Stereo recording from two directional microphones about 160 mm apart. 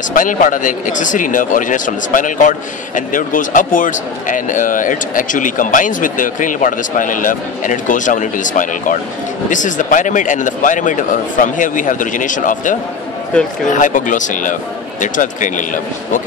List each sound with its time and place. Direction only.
0.1 s speech: 55° left (ahead or behind)
13.7 s speech: 55° left (ahead or behind)